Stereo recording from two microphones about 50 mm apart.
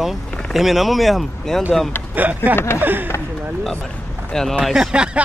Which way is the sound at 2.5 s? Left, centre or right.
Left.